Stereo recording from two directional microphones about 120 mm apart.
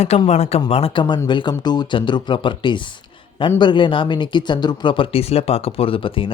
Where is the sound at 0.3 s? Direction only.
65° left (ahead or behind).